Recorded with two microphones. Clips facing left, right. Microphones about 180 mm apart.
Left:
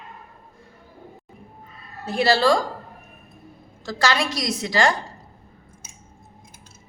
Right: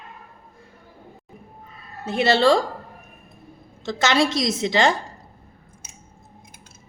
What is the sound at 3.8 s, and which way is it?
A woman's voice, 25° right (ahead or behind).